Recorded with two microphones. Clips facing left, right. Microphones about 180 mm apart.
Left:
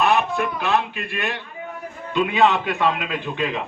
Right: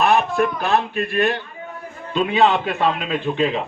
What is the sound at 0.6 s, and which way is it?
A man's voice, 35° right (ahead or behind).